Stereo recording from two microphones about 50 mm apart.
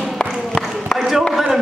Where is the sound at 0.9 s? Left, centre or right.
Centre.